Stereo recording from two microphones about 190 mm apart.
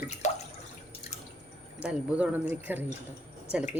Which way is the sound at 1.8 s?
5° right (ahead or behind).